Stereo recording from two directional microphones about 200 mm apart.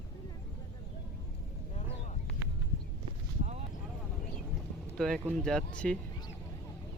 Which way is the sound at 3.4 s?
35° right (ahead or behind).